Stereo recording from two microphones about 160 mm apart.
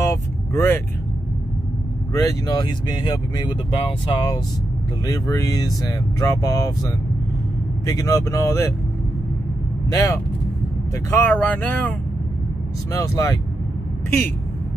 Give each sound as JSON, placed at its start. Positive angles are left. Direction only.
{"t": 0.0, "sound": "vehicle", "side_deg": 15}
{"t": 2.1, "sound": "speech", "side_deg": 20}
{"t": 9.8, "sound": "speech", "side_deg": 20}
{"t": 12.9, "sound": "speech", "side_deg": 20}